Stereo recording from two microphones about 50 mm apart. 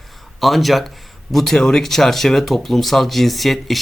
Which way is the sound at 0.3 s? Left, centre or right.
Centre.